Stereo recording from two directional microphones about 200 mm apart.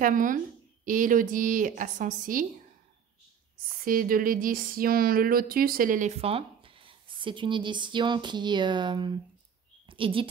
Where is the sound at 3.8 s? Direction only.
45° right (ahead or behind).